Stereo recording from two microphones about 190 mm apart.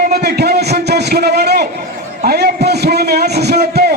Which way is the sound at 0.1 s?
55° right (ahead or behind).